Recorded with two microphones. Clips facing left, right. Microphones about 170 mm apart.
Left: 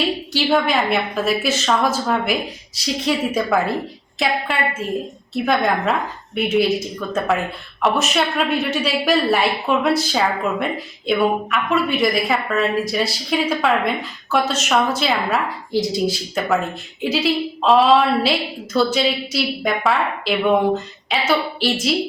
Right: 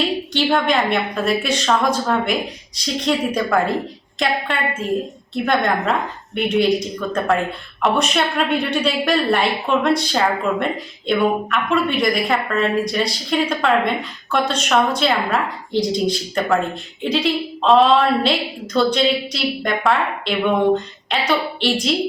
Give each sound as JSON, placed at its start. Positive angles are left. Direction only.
{"t": 0.3, "sound": "a woman's voice", "side_deg": 0}